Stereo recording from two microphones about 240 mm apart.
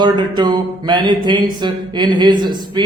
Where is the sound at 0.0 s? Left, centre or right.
Centre.